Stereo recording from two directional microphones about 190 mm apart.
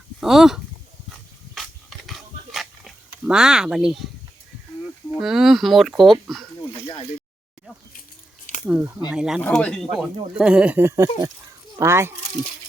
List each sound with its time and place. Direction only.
0.2 s speech: centre (ahead or behind)
1.1 s dog: centre (ahead or behind)
5.1 s speech: centre (ahead or behind)
6.8 s a sound: 25° left (ahead or behind)
8.6 s speech: 10° right (ahead or behind)